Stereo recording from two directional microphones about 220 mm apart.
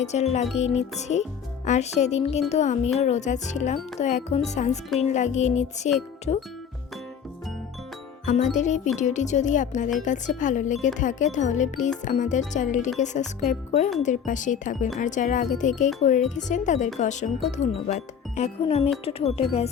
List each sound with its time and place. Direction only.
0.0 s speech: 30° left (ahead or behind)
8.2 s music: 35° left (ahead or behind)
8.5 s speech: 35° left (ahead or behind)